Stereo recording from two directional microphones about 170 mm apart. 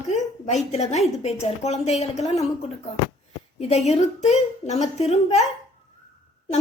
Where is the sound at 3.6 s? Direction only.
40° left (ahead or behind).